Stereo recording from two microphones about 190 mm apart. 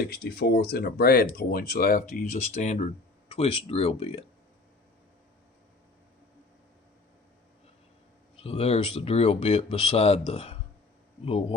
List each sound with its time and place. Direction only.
0.0 s speech: 55° left (ahead or behind)
2.1 s speech: 40° left (ahead or behind)
8.4 s speech: 35° left (ahead or behind)